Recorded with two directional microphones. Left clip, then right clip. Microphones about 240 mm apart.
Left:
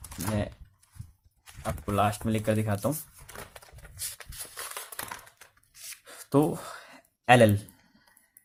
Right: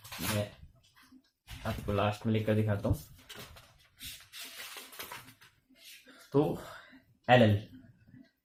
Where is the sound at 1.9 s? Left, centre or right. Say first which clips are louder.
Left 5 dB; left.